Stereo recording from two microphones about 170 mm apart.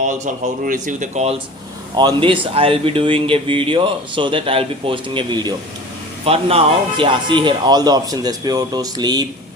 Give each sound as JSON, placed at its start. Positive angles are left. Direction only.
{"t": 0.6, "sound": "speech", "side_deg": -50}
{"t": 2.0, "sound": "speech", "side_deg": -30}